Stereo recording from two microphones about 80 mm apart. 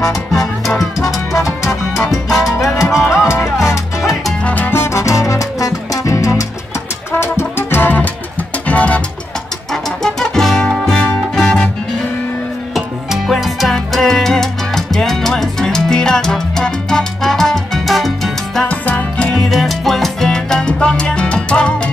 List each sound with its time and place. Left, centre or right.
0.3 s music: centre
1.7 s salsa music: centre
4.5 s music: left
4.8 s music: left
7.1 s music: left
10.0 s music: centre
12.7 s salsa music: centre
18.7 s salsa music: centre
19.3 s salsa music: centre